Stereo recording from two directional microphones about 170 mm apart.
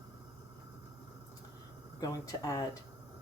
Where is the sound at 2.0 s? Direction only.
20° left (ahead or behind).